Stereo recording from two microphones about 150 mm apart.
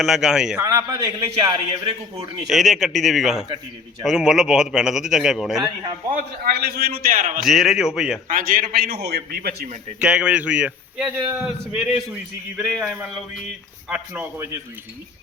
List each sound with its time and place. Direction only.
0.0 s a man's voice: 5° right (ahead or behind)
0.6 s a man's voice: 20° right (ahead or behind)
1.7 s a man's voice: 35° right (ahead or behind)
2.5 s a man's voice: centre (ahead or behind)
6.1 s a man's voice: 80° right
7.4 s a man's voice: centre (ahead or behind)
8.3 s a man's voice: 65° right (ahead or behind); by 9.6 s 90° right
10.0 s a man's voice: 5° right (ahead or behind)
14.2 s a man's voice: 15° right (ahead or behind)